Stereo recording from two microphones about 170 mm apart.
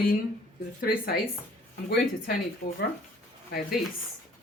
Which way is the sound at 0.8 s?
60° left (ahead or behind).